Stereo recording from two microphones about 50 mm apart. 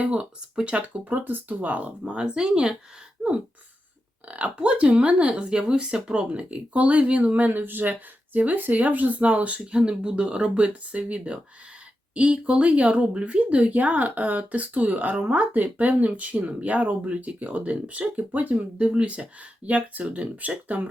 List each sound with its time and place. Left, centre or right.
0.0 s speech: right
1.1 s speech: right; by 2.7 s centre
3.2 s a sound: right
4.3 s speech: right